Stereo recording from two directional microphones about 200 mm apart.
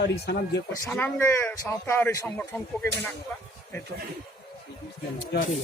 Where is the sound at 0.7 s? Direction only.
10° left (ahead or behind).